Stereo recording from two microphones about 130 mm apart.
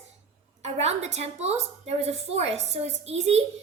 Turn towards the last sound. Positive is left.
turn(degrees=-55)  # may be behind; listen again after turning